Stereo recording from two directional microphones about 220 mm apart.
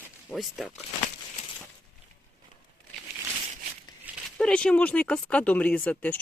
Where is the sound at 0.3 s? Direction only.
Centre (ahead or behind).